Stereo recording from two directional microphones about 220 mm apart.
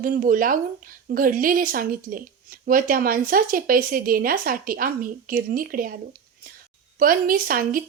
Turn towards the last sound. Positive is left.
turn(degrees=-40)  # may be behind; listen again after turning